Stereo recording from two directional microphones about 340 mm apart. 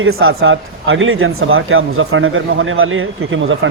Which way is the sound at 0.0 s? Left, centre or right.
Right.